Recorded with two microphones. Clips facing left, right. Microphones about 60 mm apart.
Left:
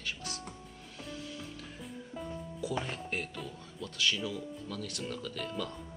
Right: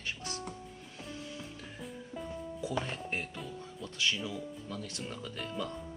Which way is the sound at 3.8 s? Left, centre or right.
Right.